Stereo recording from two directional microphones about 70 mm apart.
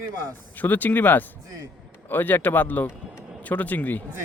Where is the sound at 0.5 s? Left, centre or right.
Left.